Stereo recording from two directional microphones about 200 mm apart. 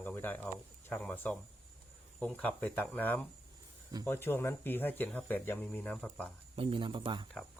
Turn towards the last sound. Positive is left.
turn(degrees=-25)  # may be behind; listen again after turning